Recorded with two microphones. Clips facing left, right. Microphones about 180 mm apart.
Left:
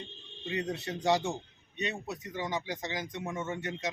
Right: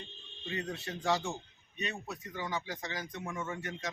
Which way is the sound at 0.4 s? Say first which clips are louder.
Left 4 dB; 20° left (ahead or behind).